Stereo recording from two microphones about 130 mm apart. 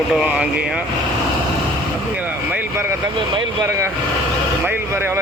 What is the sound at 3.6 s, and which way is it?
Speech, 20° right (ahead or behind).